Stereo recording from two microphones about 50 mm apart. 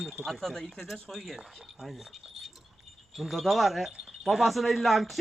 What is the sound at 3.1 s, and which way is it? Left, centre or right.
Speech, centre.